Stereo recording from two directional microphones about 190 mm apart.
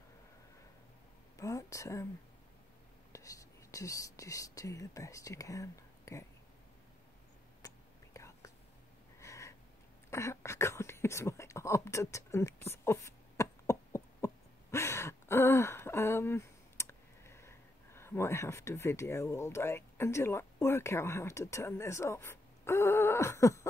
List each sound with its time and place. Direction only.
1.4 s speech: 15° left (ahead or behind)
3.1 s speech: 15° left (ahead or behind)
7.6 s whispering: 15° left (ahead or behind)
9.2 s a sound: 15° left (ahead or behind)